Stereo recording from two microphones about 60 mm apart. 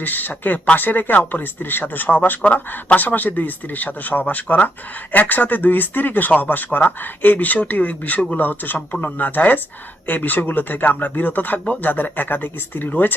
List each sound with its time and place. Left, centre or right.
0.0 s speech: left